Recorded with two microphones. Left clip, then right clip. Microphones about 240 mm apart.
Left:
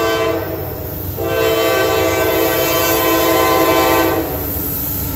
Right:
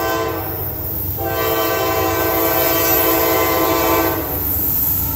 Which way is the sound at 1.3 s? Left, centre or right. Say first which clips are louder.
Left 4 dB; centre.